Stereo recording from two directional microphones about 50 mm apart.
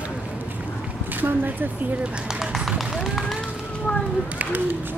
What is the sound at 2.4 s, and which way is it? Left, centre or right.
Run, centre.